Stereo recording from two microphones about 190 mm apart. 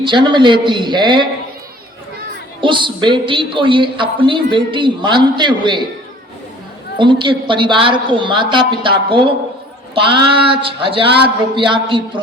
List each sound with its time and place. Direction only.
0.0 s a woman's voice: 25° right (ahead or behind)
2.6 s a woman's voice: 25° right (ahead or behind)
7.0 s a woman's voice: 25° right (ahead or behind)